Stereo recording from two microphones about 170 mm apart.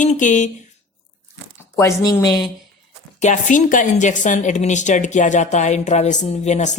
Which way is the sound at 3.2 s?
45° left (ahead or behind).